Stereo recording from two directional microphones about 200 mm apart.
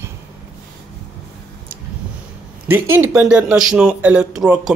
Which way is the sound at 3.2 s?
5° right (ahead or behind).